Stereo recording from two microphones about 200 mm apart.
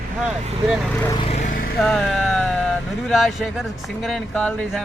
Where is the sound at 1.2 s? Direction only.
30° left (ahead or behind).